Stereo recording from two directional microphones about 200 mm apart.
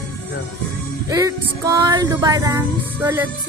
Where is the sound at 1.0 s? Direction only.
15° right (ahead or behind).